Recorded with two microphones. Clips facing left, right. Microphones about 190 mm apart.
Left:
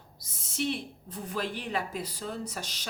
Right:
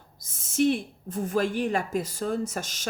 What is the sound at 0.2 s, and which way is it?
Speech, 50° right (ahead or behind).